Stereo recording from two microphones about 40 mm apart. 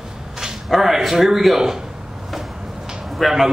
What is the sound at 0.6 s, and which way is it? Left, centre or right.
A man's voice, centre.